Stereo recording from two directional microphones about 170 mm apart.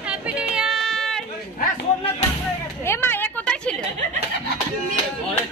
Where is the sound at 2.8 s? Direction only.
15° left (ahead or behind).